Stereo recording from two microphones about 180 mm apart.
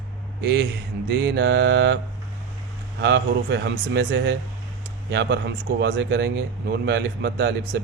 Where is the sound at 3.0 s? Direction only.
75° right (ahead or behind).